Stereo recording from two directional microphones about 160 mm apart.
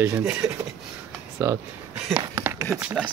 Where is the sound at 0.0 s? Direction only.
15° right (ahead or behind).